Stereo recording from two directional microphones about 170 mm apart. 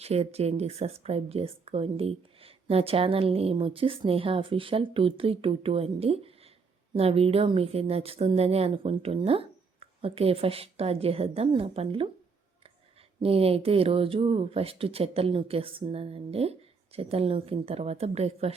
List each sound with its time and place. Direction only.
0.0 s speech: 40° right (ahead or behind)
13.2 s speech: 35° right (ahead or behind)